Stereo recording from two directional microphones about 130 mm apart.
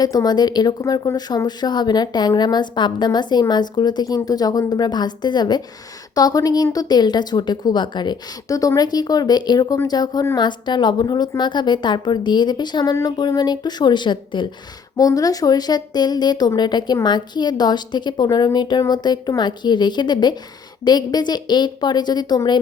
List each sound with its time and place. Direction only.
0.0 s a woman's voice: 30° left (ahead or behind)